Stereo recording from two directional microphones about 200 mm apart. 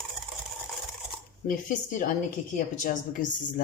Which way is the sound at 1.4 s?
40° left (ahead or behind).